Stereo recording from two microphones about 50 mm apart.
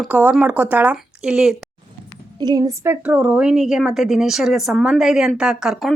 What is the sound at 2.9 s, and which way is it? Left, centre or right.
Speech, right.